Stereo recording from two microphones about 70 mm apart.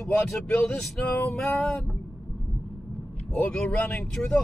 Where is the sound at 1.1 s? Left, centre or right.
Left.